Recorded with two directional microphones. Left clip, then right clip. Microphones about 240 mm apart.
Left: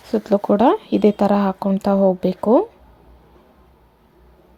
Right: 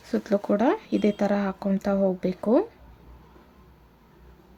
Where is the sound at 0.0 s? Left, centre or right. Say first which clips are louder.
Left 7 dB; centre.